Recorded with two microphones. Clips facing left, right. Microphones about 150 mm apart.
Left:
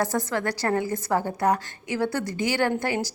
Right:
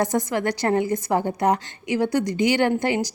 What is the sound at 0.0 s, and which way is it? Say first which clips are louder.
A woman's voice: right 3 dB; 20° right (ahead or behind).